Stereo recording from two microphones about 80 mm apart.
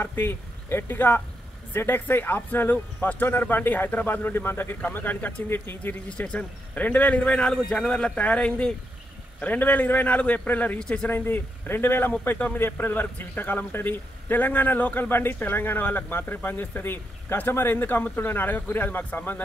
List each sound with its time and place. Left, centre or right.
0.0 s a man's voice: left
6.0 s a man's voice: centre
11.1 s a man's voice: left